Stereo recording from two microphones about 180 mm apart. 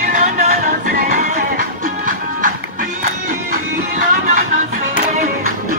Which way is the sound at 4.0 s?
45° right (ahead or behind).